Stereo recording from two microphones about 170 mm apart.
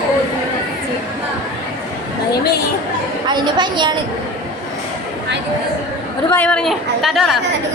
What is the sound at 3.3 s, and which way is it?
Speech, 25° right (ahead or behind).